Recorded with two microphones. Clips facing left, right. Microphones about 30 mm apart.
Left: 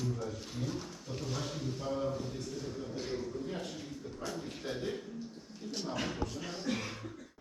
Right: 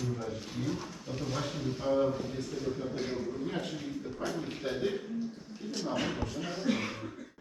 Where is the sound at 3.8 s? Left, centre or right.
Right.